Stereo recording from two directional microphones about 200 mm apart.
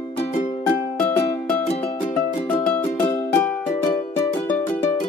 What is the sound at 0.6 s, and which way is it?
Music, 10° left (ahead or behind).